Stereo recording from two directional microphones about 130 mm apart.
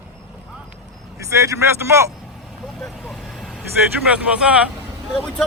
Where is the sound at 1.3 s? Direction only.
25° right (ahead or behind).